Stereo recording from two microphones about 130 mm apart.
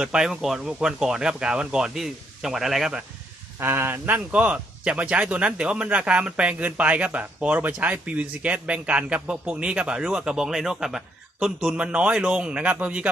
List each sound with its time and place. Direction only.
0.0 s speech: 5° right (ahead or behind)
3.6 s speech: 15° right (ahead or behind)